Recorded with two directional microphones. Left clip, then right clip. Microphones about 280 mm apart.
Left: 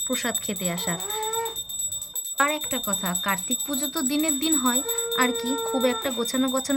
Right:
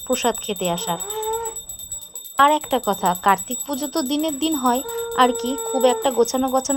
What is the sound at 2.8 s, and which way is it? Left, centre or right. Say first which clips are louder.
Speech: right 10 dB; right.